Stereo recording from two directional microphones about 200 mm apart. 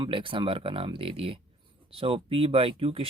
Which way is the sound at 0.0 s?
25° right (ahead or behind).